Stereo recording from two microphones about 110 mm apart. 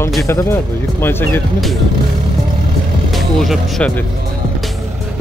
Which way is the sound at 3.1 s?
Centre (ahead or behind).